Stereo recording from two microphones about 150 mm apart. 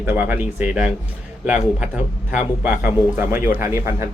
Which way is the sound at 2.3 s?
10° right (ahead or behind).